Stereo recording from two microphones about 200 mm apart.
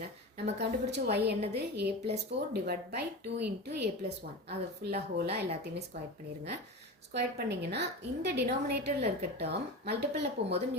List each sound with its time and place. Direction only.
0.6 s speech: 55° right (ahead or behind)
7.1 s speech: 55° right (ahead or behind)